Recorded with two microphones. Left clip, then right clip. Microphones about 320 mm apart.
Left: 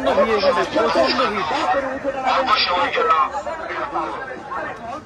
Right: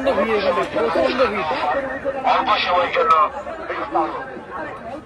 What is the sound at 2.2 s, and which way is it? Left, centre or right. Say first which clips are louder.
Speech: even; centre.